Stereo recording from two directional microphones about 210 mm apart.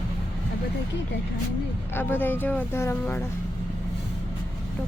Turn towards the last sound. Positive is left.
turn(degrees=10)  # may be behind; listen again after turning